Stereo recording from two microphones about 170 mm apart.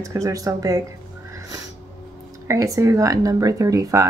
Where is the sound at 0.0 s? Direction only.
20° right (ahead or behind).